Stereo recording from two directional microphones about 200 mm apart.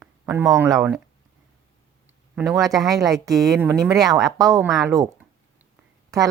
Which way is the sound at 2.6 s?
Centre (ahead or behind).